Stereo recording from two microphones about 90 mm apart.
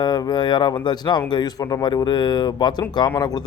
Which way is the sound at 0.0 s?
50° left (ahead or behind).